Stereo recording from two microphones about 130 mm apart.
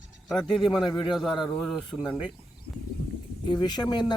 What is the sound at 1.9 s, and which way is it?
Speech, 10° left (ahead or behind).